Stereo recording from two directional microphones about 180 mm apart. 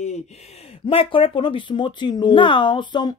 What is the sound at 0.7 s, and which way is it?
Speech, 30° left (ahead or behind).